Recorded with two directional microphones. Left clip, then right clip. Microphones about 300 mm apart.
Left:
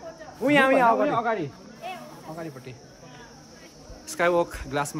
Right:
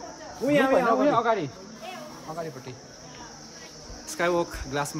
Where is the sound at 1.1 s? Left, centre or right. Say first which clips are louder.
Right 2 dB; centre.